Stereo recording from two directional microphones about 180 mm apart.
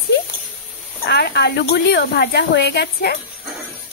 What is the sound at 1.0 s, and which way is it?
Speech, 65° left (ahead or behind).